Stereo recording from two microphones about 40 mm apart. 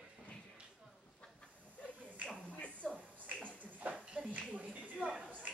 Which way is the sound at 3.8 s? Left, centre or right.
Right.